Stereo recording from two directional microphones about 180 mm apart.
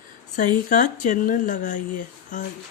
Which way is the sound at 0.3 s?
45° left (ahead or behind).